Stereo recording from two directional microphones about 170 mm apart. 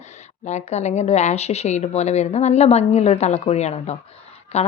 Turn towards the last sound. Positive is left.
turn(degrees=40)  # may be behind; listen again after turning